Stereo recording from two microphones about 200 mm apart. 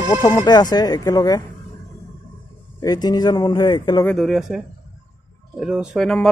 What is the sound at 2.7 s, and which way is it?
Speech, 20° left (ahead or behind).